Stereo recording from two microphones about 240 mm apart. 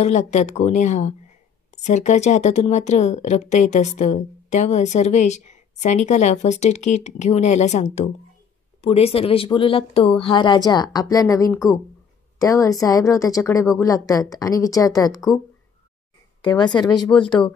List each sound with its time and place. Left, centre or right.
0.0 s a woman's voice: left